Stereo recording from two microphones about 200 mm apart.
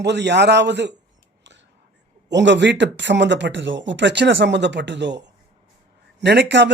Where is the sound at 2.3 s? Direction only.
60° right (ahead or behind).